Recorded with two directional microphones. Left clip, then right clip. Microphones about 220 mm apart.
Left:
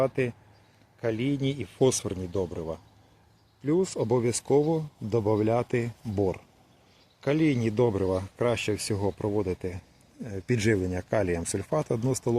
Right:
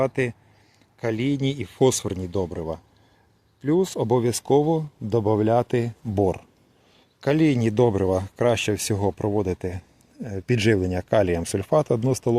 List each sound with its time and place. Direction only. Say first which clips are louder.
0.0 s speech: right 3 dB; 45° right (ahead or behind)
10.2 s speech: right 5 dB; 35° right (ahead or behind)